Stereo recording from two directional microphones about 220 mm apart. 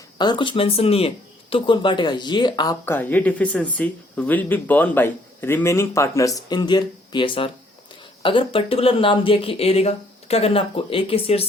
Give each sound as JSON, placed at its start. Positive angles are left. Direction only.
{"t": 0.2, "sound": "speech", "side_deg": 20}